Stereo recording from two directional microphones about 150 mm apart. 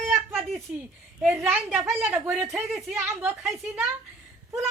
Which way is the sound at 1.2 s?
10° right (ahead or behind).